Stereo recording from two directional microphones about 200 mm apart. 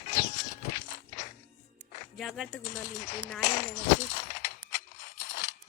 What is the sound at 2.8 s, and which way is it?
Speech, 40° left (ahead or behind).